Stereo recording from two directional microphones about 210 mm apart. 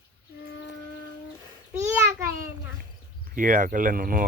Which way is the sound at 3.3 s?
40° right (ahead or behind).